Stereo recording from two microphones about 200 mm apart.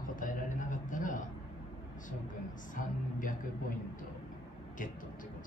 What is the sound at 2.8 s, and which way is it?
Speech, 40° left (ahead or behind).